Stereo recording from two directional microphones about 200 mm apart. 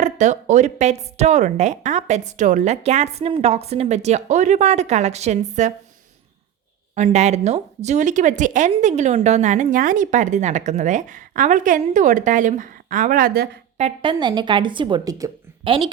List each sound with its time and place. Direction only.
0.0 s speech: 35° right (ahead or behind)
6.9 s speech: 35° right (ahead or behind)
13.7 s speech: 30° right (ahead or behind)